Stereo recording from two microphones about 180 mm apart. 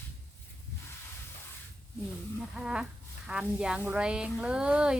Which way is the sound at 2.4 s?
5° right (ahead or behind).